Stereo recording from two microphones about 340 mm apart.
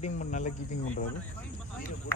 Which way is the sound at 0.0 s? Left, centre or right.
Left.